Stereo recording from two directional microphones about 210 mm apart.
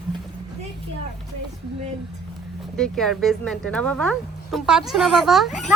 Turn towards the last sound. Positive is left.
turn(degrees=0)  # may be behind; listen again after turning